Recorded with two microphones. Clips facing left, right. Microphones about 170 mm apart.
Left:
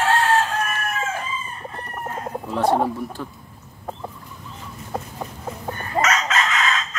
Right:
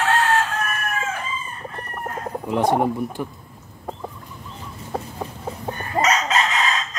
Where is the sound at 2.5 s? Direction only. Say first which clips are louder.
Right 1 dB; 15° right (ahead or behind).